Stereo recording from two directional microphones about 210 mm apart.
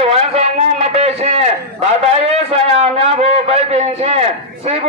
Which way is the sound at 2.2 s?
30° right (ahead or behind).